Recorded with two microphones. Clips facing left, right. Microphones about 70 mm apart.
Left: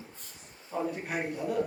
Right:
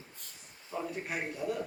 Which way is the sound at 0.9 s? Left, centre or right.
Left.